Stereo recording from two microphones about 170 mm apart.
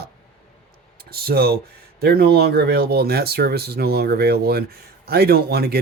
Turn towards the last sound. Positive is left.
turn(degrees=-70)  # may be behind; listen again after turning